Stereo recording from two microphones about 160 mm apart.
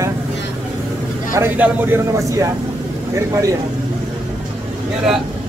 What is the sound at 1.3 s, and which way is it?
A man's voice, 10° right (ahead or behind).